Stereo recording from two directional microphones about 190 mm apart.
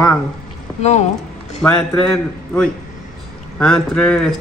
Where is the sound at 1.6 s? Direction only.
5° left (ahead or behind).